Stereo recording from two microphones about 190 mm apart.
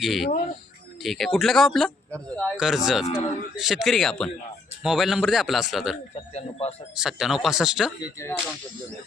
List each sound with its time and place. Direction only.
0.0 s speech: centre (ahead or behind)
6.1 s speech: 35° left (ahead or behind)
6.9 s speech: 5° right (ahead or behind)
8.0 s whip: 15° left (ahead or behind)